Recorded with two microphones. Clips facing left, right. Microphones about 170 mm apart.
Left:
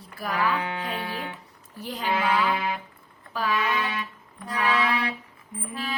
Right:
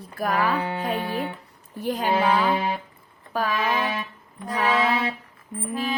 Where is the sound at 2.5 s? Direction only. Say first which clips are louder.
Right 3 dB; 30° right (ahead or behind).